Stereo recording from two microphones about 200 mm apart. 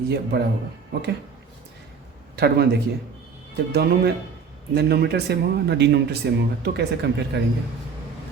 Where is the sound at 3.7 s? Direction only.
55° right (ahead or behind).